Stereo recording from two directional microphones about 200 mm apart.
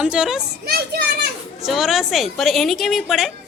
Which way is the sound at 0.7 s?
50° right (ahead or behind).